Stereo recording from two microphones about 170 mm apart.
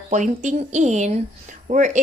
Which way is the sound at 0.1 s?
45° right (ahead or behind).